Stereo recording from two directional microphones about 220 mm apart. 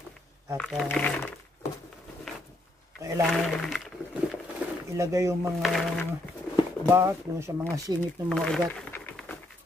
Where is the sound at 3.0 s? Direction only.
15° right (ahead or behind).